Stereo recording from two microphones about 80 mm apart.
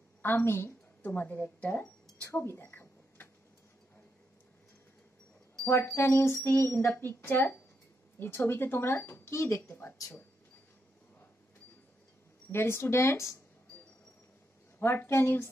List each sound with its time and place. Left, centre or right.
0.2 s speech: left
2.2 s a sound: left
5.7 s speech: left
12.4 s speech: left
14.8 s speech: left